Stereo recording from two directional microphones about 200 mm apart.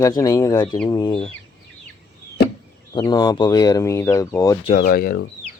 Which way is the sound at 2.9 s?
20° left (ahead or behind).